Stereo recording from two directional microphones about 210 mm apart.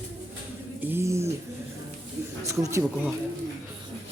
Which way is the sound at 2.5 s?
15° right (ahead or behind).